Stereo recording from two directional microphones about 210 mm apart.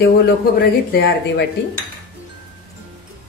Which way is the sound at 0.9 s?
50° left (ahead or behind).